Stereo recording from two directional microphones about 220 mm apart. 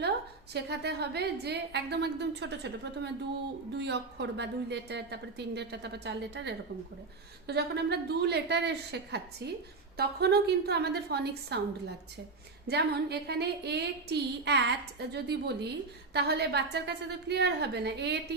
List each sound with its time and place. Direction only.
0.5 s a woman's voice: 50° right (ahead or behind)